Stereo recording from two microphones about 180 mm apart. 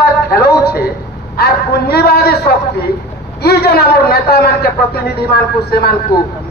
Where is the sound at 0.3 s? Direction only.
60° left (ahead or behind).